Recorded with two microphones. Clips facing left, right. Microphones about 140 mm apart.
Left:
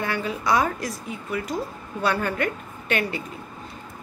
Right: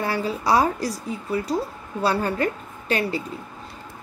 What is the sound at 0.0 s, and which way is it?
Speech, 35° right (ahead or behind).